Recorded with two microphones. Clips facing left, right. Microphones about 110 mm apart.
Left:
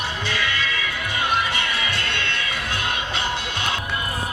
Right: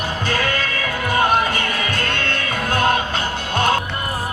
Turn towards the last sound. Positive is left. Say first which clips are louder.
# right 7 dB
turn(degrees=-45)  # may be behind; listen again after turning